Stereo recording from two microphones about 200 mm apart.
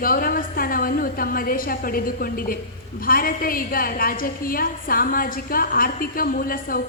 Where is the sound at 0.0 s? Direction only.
45° left (ahead or behind).